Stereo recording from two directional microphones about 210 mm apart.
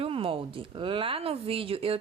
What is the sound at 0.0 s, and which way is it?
Speech, 25° right (ahead or behind).